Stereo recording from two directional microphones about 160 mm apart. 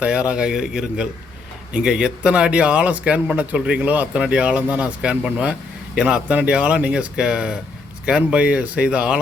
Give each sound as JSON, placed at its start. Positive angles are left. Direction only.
{"t": 0.0, "sound": "a man's voice", "side_deg": -5}